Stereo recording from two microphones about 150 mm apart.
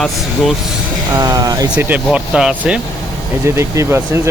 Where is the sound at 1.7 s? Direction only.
10° right (ahead or behind).